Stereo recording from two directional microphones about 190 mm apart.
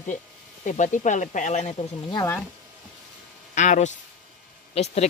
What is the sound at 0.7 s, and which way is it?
Speech, 40° left (ahead or behind).